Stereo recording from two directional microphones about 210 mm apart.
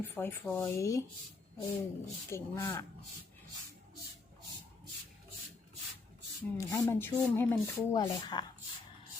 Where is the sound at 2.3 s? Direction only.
15° left (ahead or behind).